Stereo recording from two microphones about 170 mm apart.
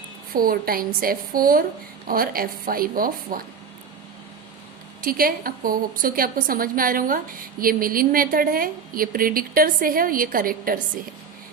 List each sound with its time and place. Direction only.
0.3 s a woman's voice: 60° right (ahead or behind)
4.9 s a woman's voice: 55° right (ahead or behind)